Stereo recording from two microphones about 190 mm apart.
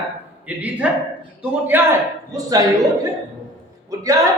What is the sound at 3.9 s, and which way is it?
Speech, 20° right (ahead or behind).